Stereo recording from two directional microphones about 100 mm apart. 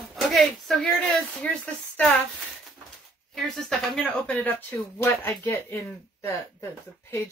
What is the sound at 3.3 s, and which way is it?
Speech, 5° left (ahead or behind).